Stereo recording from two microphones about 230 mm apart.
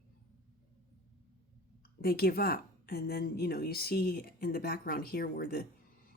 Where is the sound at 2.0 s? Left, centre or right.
Left.